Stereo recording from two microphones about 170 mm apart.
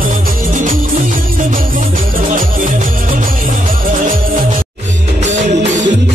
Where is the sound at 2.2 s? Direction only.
50° right (ahead or behind).